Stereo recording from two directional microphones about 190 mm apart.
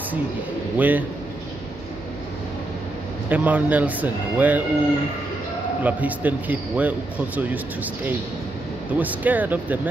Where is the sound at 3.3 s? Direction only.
10° right (ahead or behind).